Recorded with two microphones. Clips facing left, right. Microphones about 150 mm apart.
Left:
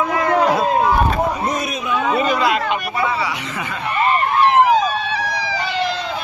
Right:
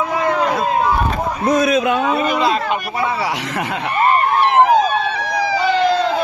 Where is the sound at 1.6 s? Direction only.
90° right.